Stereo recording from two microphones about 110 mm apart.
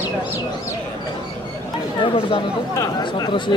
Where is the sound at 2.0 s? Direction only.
55° left (ahead or behind).